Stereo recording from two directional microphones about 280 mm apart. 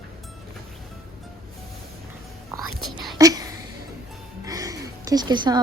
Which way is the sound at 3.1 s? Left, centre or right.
Centre.